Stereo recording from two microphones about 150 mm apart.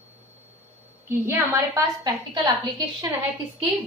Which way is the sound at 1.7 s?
25° right (ahead or behind).